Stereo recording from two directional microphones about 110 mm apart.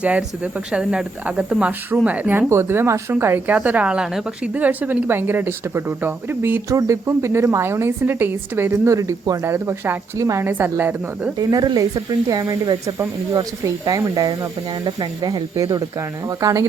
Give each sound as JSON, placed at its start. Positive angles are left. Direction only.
{"t": 0.0, "sound": "a woman's voice", "side_deg": -10}
{"t": 11.3, "sound": "speech", "side_deg": -35}